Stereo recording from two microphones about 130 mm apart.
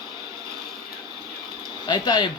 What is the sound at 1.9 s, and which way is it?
Speech, 35° left (ahead or behind).